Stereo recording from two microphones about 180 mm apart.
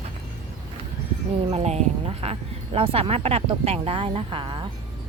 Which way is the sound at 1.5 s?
35° right (ahead or behind).